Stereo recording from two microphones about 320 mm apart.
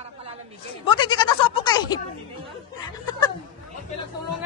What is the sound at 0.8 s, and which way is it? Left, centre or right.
Goat, centre.